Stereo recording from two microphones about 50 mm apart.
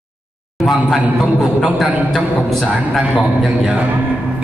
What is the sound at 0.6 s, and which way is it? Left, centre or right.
A man's voice, centre.